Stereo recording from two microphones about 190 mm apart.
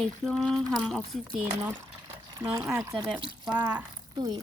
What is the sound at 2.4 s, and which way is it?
Speech, 20° right (ahead or behind).